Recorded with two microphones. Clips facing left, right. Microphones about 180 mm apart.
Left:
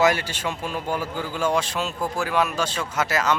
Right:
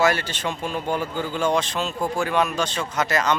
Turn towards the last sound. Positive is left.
turn(degrees=5)  # may be behind; listen again after turning